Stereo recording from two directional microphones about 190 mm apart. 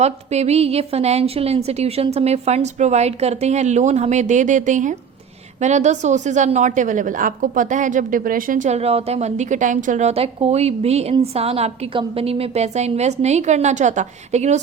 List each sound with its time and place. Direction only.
0.0 s a woman's voice: 35° right (ahead or behind)